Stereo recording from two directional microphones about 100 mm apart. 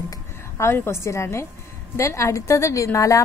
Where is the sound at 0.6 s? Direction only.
25° left (ahead or behind).